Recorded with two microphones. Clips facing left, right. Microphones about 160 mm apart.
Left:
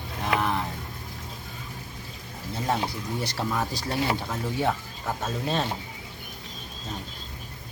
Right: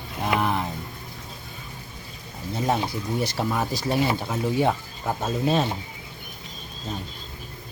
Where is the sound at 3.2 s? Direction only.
15° right (ahead or behind).